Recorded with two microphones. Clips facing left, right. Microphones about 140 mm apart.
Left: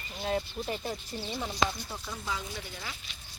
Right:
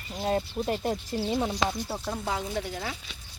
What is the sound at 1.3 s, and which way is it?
Speech, 60° right (ahead or behind).